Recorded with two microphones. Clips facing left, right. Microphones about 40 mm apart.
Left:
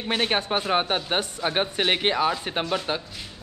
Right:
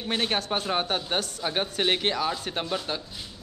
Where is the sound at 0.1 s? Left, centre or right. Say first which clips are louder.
Left 3 dB; left.